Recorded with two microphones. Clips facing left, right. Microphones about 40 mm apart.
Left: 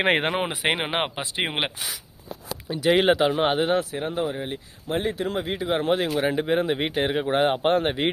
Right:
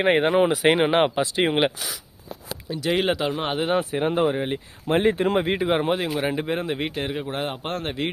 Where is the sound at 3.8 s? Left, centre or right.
Right.